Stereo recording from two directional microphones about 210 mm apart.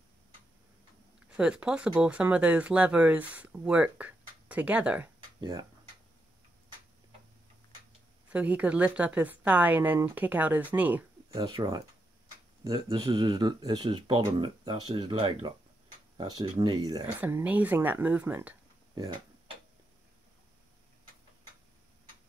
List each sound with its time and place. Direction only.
1.3 s speech: 5° right (ahead or behind)
5.4 s speech: 20° right (ahead or behind)
8.3 s speech: 5° right (ahead or behind)
11.4 s speech: 20° right (ahead or behind)
18.9 s tick-tock: 20° right (ahead or behind)